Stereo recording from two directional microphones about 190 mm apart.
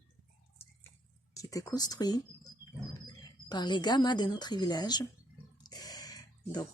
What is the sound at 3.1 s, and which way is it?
Speech, 20° left (ahead or behind).